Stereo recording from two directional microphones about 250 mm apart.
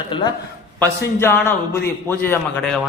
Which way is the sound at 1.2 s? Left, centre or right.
Centre.